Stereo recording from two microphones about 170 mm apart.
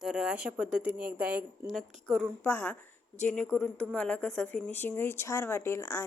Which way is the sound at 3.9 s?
5° left (ahead or behind).